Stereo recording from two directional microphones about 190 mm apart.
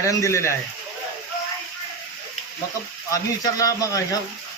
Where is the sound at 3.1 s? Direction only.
15° left (ahead or behind).